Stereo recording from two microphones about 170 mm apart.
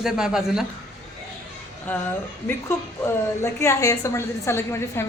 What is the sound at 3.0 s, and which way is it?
A woman's voice, 15° left (ahead or behind).